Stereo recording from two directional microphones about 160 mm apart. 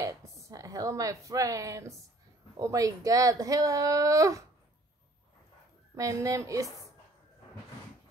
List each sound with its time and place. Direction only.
0.0 s speech: 20° right (ahead or behind)
5.9 s speech: 20° right (ahead or behind)